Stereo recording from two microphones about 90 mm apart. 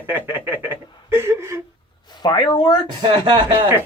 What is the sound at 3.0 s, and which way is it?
Speech, 70° right (ahead or behind).